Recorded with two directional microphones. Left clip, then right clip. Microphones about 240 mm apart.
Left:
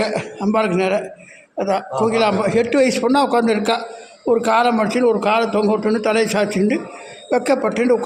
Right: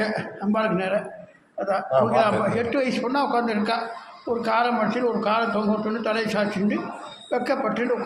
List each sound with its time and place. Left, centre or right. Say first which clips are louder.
0.0 s a man's voice: left 6 dB; left